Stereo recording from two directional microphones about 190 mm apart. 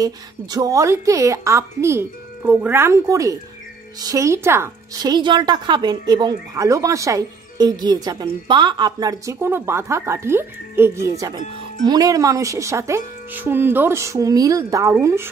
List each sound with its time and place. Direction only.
0.0 s speech: 20° right (ahead or behind)